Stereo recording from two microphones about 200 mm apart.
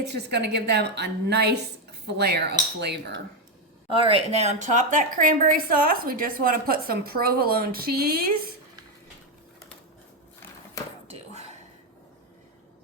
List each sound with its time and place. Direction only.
0.0 s a woman's voice: 55° right (ahead or behind)
3.8 s a woman's voice: 25° right (ahead or behind); by 8.2 s 50° right (ahead or behind)
11.1 s whispering: 35° right (ahead or behind)